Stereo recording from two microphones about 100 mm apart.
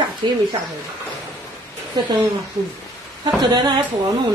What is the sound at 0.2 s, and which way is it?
Speech, 55° right (ahead or behind).